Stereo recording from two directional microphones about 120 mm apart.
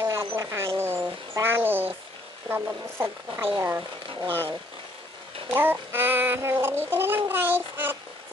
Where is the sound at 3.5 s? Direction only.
15° right (ahead or behind).